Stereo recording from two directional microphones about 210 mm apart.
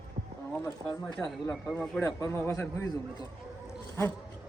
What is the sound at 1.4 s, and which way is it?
Speech, 10° left (ahead or behind).